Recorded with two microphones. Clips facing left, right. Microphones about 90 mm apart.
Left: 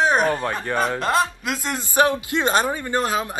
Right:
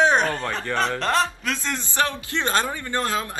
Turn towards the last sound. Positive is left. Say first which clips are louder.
# left 3 dB
turn(degrees=15)  # may be behind; listen again after turning